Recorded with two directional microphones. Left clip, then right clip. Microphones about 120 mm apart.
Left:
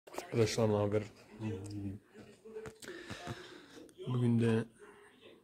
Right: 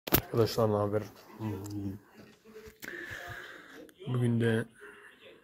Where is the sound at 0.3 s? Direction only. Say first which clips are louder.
Right 1 dB; 5° right (ahead or behind).